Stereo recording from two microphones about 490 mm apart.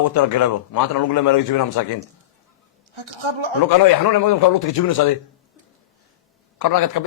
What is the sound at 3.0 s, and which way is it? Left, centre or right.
Speech, right.